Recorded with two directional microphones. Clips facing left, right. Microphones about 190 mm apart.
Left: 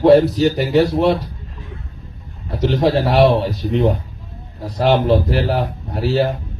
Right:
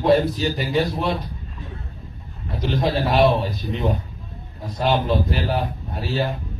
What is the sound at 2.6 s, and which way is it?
A man's voice, 75° left (ahead or behind).